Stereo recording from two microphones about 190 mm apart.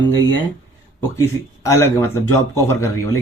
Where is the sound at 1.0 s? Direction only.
15° left (ahead or behind).